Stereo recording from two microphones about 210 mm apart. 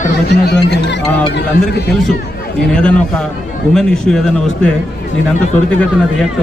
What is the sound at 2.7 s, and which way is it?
A man's voice, 5° left (ahead or behind).